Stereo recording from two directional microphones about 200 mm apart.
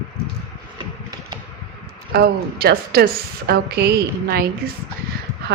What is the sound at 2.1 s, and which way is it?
A woman's voice, 50° right (ahead or behind).